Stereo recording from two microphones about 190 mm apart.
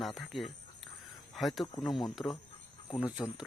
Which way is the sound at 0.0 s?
Centre (ahead or behind).